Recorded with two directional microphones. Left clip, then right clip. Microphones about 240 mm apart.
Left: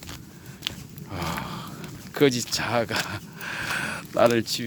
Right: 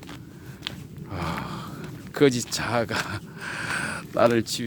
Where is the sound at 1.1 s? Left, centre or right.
Centre.